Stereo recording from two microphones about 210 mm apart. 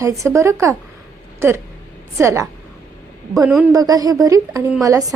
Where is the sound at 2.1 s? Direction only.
15° right (ahead or behind).